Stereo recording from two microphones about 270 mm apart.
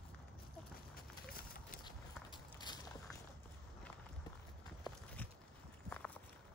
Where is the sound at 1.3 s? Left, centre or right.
Left.